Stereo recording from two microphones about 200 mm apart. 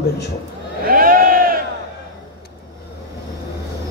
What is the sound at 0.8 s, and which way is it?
Sheep, 45° right (ahead or behind).